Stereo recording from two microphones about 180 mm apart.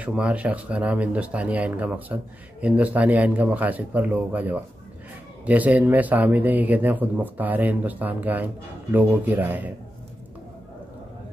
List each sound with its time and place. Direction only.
0.0 s speech: 5° right (ahead or behind)